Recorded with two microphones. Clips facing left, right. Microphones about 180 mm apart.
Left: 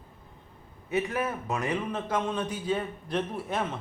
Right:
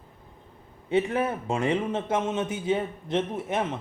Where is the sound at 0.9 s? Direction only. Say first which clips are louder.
Right 4 dB; 25° right (ahead or behind).